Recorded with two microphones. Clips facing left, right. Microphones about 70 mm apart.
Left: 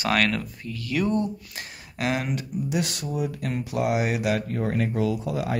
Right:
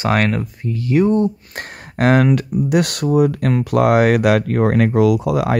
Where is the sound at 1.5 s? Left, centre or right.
Right.